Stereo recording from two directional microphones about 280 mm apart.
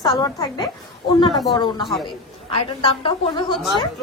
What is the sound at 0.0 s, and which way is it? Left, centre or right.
Speech, centre.